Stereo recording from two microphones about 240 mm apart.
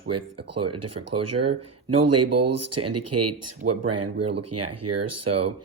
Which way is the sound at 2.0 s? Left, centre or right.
Right.